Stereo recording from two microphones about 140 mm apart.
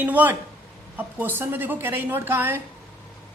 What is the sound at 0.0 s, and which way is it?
Speech, 10° right (ahead or behind).